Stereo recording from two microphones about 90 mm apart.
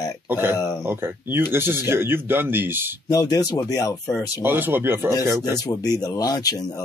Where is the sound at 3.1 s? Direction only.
45° left (ahead or behind).